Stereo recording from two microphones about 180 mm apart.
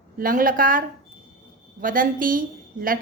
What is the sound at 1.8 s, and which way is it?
A woman's voice, 50° right (ahead or behind).